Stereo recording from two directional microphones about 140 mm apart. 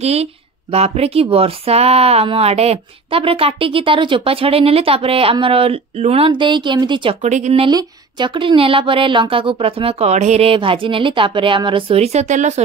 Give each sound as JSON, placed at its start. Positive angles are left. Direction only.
{"t": 0.0, "sound": "speech", "side_deg": -50}
{"t": 7.2, "sound": "speech", "side_deg": -55}
{"t": 7.6, "sound": "speech", "side_deg": -35}